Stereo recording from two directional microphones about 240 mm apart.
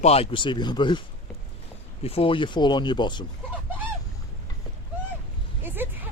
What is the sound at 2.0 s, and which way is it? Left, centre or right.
Speech, left.